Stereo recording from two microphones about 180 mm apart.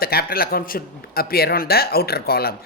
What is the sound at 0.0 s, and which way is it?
Speech, 60° left (ahead or behind).